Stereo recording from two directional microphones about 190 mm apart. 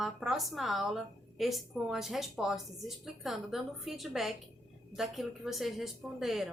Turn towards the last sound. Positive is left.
turn(degrees=0)  # may be behind; listen again after turning